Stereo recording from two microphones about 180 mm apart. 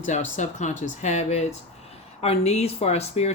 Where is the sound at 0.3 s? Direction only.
45° left (ahead or behind).